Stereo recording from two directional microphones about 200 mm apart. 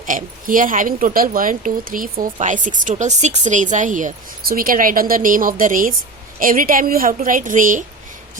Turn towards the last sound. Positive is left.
turn(degrees=-40)  # may be behind; listen again after turning